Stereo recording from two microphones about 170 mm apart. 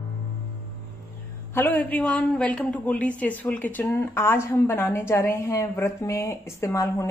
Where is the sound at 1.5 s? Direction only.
10° left (ahead or behind).